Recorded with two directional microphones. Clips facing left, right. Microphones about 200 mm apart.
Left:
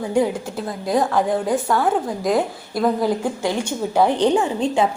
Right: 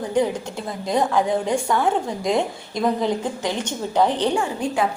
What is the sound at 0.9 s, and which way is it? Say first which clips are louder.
A woman's voice: left 1 dB; centre (ahead or behind).